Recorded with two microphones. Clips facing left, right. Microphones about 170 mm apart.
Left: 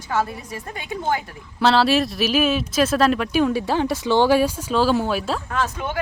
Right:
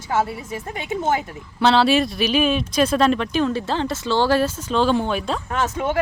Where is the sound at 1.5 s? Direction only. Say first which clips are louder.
Right 1 dB; centre (ahead or behind).